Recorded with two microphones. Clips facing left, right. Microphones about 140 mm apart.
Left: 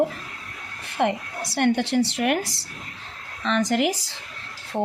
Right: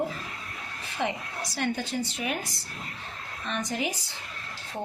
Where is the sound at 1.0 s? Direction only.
65° left (ahead or behind); by 4.1 s 90° left.